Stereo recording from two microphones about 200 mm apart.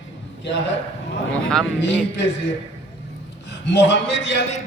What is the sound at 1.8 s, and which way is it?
Speech, 65° left (ahead or behind).